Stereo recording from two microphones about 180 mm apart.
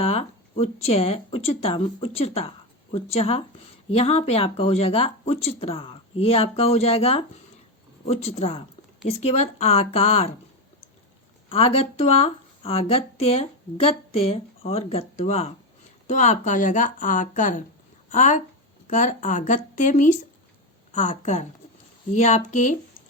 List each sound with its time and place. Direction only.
0.0 s speech: 35° left (ahead or behind)
11.4 s speech: 35° left (ahead or behind)